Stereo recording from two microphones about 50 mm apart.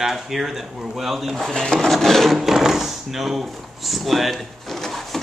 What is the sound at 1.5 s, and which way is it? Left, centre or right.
Speech, centre.